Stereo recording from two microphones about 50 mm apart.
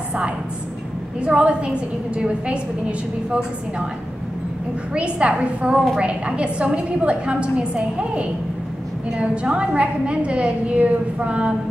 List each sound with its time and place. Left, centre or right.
1.2 s a woman's voice: right
4.9 s a woman's voice: right